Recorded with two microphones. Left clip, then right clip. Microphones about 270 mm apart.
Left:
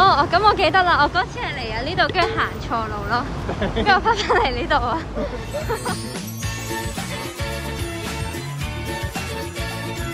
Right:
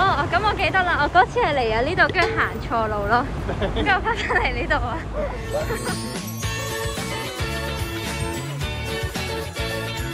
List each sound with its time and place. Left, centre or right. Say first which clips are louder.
0.0 s speech: left 5 dB; centre
1.1 s a woman's voice: right 6 dB; centre